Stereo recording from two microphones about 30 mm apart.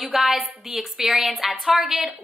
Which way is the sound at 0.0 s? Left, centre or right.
Centre.